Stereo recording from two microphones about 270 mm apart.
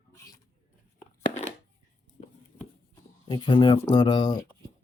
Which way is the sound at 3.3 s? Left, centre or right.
Centre.